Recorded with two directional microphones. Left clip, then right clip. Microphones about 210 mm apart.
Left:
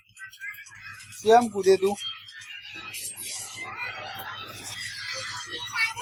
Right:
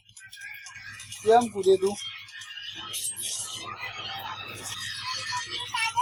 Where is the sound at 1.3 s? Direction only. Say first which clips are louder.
Left 2 dB; 25° left (ahead or behind).